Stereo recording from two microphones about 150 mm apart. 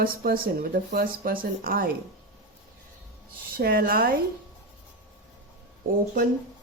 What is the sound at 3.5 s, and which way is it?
Speech, 75° right (ahead or behind).